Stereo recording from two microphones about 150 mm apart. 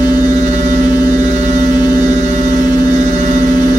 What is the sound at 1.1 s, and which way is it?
Hum, 55° right (ahead or behind).